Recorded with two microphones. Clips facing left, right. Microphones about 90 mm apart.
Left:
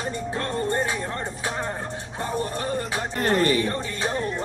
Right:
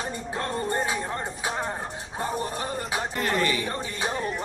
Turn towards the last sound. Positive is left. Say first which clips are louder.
# left 2 dB
turn(degrees=-15)  # may be behind; listen again after turning